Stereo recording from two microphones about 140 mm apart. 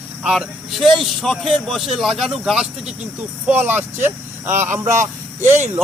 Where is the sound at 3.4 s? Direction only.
15° right (ahead or behind).